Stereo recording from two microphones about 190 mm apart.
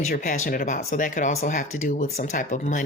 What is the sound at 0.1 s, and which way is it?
Speech, 45° left (ahead or behind).